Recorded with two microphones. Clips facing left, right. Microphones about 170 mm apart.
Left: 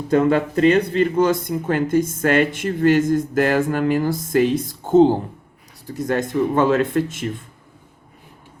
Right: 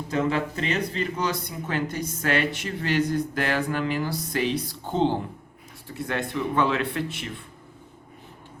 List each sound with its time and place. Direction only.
0.1 s speech: 55° left (ahead or behind)